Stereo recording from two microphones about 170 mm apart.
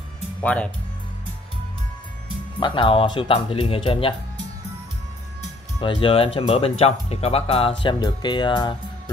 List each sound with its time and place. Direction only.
0.4 s speech: 10° left (ahead or behind)
2.6 s speech: 30° left (ahead or behind)
5.8 s speech: 30° left (ahead or behind)